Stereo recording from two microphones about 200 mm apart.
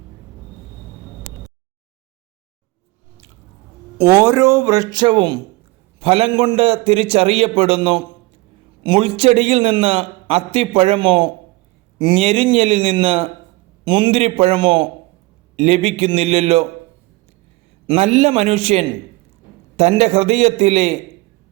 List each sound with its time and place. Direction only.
3.9 s a man's voice: 10° right (ahead or behind); by 16.6 s 30° right (ahead or behind)
17.8 s a man's voice: 30° right (ahead or behind)